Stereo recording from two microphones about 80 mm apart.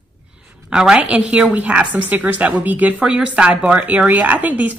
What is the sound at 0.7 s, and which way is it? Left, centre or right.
A woman's voice, centre.